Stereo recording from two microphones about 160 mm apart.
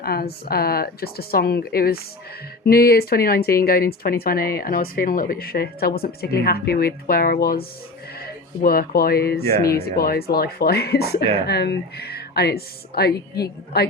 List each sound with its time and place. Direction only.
0.0 s a woman's voice: 70° left (ahead or behind)
11.4 s speech: 90° left